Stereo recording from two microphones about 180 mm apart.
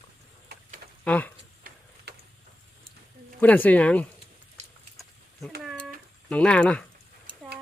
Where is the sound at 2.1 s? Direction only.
65° right (ahead or behind).